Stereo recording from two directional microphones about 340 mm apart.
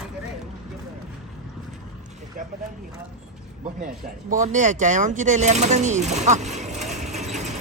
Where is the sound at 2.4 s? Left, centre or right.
Right.